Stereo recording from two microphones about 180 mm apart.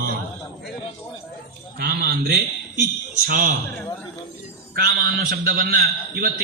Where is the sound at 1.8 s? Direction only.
55° right (ahead or behind).